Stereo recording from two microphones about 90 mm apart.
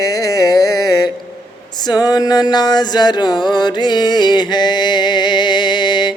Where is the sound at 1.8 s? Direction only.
50° left (ahead or behind).